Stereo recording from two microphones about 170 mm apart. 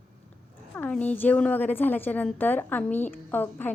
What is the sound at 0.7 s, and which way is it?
A woman's voice, 10° left (ahead or behind).